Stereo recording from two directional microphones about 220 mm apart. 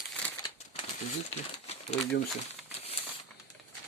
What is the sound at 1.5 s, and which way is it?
Crumpling, 30° left (ahead or behind).